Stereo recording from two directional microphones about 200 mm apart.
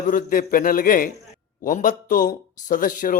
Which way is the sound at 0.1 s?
45° left (ahead or behind).